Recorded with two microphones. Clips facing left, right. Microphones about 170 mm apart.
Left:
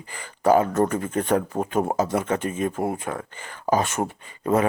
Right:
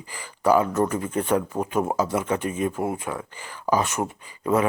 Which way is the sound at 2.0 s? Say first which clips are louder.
Left 1 dB; 45° left (ahead or behind).